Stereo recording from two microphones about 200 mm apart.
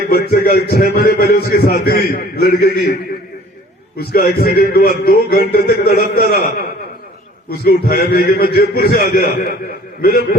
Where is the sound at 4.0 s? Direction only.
50° left (ahead or behind).